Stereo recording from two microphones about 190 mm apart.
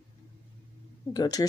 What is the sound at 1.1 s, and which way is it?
Speech, 20° left (ahead or behind).